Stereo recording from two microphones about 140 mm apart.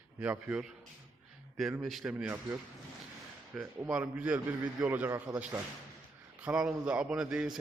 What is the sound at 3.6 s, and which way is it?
A man's voice, 10° right (ahead or behind).